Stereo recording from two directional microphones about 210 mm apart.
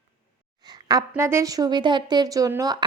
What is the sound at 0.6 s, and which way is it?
A woman's voice, 20° right (ahead or behind).